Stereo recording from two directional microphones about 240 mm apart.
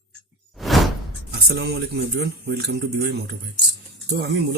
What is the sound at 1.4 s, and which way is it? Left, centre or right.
Speech, right.